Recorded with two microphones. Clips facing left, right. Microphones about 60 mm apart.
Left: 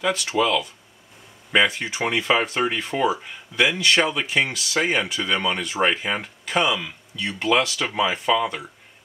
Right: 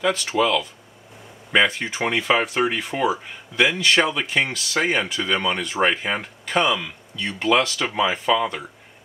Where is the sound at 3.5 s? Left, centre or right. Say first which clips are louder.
Right 1 dB; centre.